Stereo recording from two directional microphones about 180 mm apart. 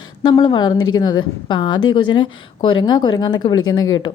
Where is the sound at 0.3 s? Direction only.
25° left (ahead or behind).